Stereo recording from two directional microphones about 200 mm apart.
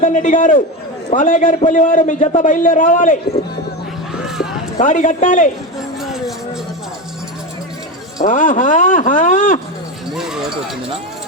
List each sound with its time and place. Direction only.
0.0 s a man's voice: 40° left (ahead or behind)
4.8 s a man's voice: 40° left (ahead or behind)
6.0 s music: centre (ahead or behind)
8.2 s a man's voice: 40° left (ahead or behind)
10.2 s a sound: 5° right (ahead or behind)